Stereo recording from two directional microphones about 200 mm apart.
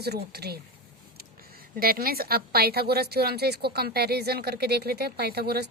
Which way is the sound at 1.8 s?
50° right (ahead or behind).